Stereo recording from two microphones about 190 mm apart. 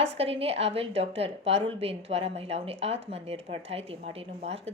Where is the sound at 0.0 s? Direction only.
30° right (ahead or behind).